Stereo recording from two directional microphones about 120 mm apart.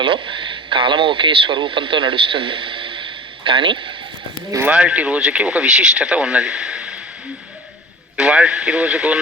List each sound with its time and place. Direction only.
0.0 s speech: 45° right (ahead or behind)
4.6 s speech: 10° right (ahead or behind)
8.1 s speech: 5° right (ahead or behind)